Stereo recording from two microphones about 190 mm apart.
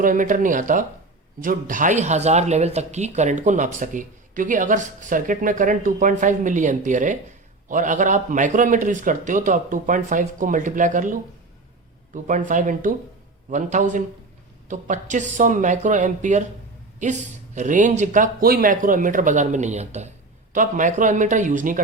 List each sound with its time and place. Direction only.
0.0 s speech: 45° right (ahead or behind)